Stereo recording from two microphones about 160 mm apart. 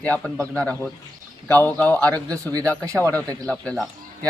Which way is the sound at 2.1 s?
20° right (ahead or behind).